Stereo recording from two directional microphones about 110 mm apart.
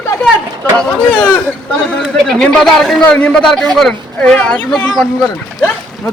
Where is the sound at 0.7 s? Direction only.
10° left (ahead or behind).